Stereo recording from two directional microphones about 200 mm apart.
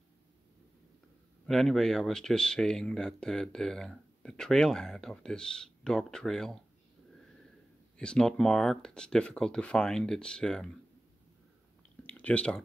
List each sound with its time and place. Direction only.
1.5 s speech: centre (ahead or behind)
8.0 s speech: 5° left (ahead or behind)
12.0 s a sound: 10° left (ahead or behind)